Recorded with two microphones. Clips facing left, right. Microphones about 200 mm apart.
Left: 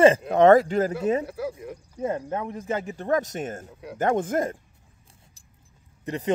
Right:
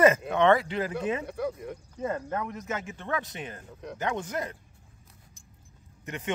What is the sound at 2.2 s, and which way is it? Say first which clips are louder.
Speech: left 3 dB; 30° left (ahead or behind).